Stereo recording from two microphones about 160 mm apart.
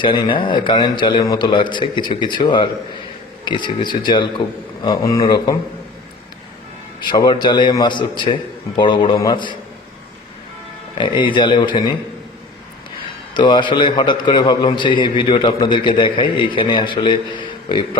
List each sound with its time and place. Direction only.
0.0 s a man's voice: 30° left (ahead or behind)
7.1 s a man's voice: 30° left (ahead or behind)
10.9 s a man's voice: 30° left (ahead or behind)
13.3 s a man's voice: 30° left (ahead or behind)